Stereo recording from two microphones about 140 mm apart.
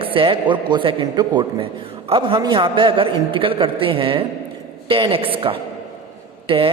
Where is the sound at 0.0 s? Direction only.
40° right (ahead or behind).